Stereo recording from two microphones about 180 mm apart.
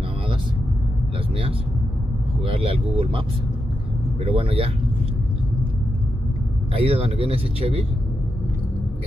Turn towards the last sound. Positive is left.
turn(degrees=-30)  # may be behind; listen again after turning